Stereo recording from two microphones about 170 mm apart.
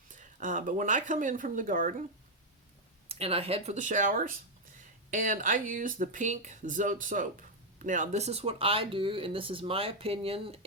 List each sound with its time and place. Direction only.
0.1 s speech: 50° right (ahead or behind)
3.1 s speech: 35° right (ahead or behind)